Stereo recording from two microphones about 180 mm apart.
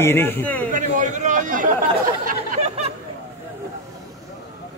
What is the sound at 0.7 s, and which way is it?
A man's voice, 45° right (ahead or behind).